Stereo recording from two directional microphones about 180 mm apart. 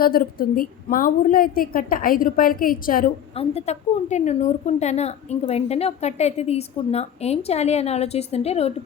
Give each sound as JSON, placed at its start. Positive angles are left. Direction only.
{"t": 0.0, "sound": "a woman's voice", "side_deg": 55}
{"t": 3.3, "sound": "a woman's voice", "side_deg": 35}